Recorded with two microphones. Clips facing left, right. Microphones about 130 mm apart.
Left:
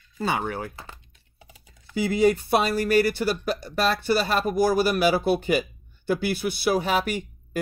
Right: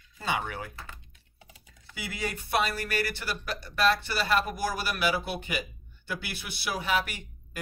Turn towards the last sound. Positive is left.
turn(degrees=40)  # may be behind; listen again after turning